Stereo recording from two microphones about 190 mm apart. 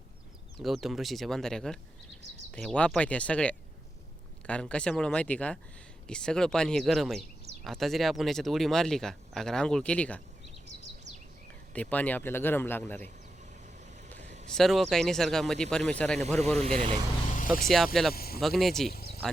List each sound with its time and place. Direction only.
0.6 s speech: centre (ahead or behind)
11.7 s speech: 10° left (ahead or behind)
14.2 s vehicle: 35° right (ahead or behind)
14.5 s speech: centre (ahead or behind)
16.6 s speech: 30° right (ahead or behind)
17.7 s speech: centre (ahead or behind)
18.1 s speech: 55° left (ahead or behind)
18.3 s speech: centre (ahead or behind)
18.9 s a sound: 55° left (ahead or behind)